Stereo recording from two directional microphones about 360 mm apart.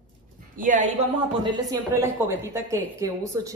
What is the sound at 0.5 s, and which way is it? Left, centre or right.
A woman's voice, right.